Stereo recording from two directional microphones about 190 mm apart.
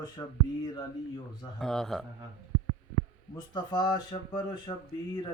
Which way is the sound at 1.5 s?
Centre (ahead or behind).